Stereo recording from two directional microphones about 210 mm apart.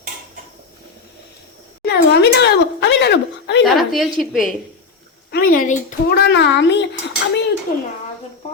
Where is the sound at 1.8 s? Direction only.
50° left (ahead or behind).